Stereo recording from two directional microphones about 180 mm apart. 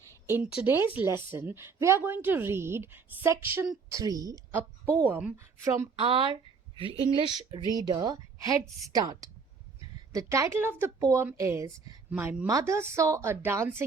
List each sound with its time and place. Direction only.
0.3 s a woman's voice: 10° right (ahead or behind)
5.0 s a woman's voice: 10° right (ahead or behind)
6.0 s a woman's voice: 30° right (ahead or behind)